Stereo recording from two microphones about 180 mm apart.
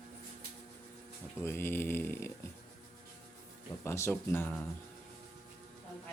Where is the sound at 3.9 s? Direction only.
15° left (ahead or behind).